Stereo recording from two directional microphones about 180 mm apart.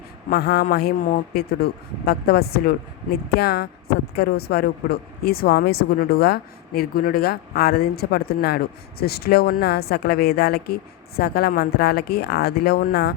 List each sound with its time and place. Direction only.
0.3 s speech: 60° left (ahead or behind)